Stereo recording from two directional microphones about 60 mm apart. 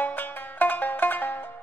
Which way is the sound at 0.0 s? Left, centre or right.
Left.